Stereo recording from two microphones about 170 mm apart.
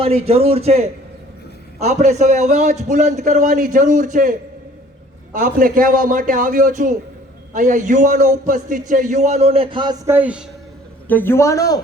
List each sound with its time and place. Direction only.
0.0 s a man's voice: 35° right (ahead or behind)
10.1 s a man's voice: 10° right (ahead or behind)
11.1 s a man's voice: 10° left (ahead or behind)